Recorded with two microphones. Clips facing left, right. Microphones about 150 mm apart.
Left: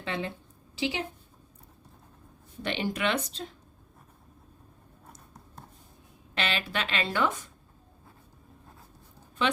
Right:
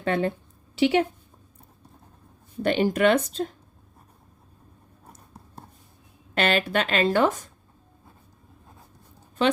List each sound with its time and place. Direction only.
0.0 s speech: 50° right (ahead or behind)
0.8 s a woman's voice: 65° right (ahead or behind)
2.6 s speech: 45° right (ahead or behind)
6.3 s speech: 50° right (ahead or behind)
9.4 s a woman's voice: 40° right (ahead or behind)